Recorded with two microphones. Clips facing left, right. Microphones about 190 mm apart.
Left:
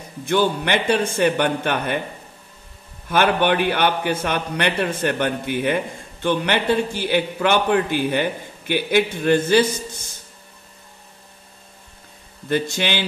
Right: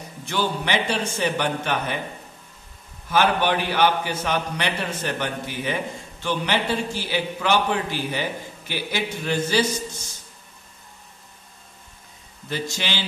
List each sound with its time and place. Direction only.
0.2 s a man's voice: 55° left (ahead or behind)
3.1 s a man's voice: 60° left (ahead or behind)
12.4 s a man's voice: 55° left (ahead or behind)